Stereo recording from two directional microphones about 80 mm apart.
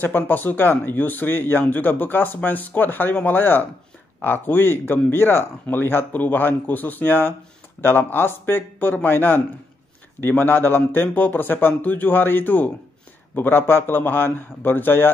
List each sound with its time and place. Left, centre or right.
0.0 s speech: left